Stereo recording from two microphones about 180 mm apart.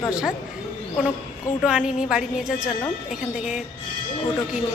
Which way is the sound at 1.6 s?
5° right (ahead or behind).